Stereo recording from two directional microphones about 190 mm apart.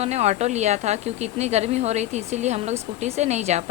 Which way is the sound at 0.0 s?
35° right (ahead or behind).